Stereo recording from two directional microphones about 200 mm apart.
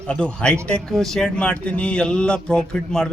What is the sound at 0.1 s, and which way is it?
A man's voice, 5° left (ahead or behind).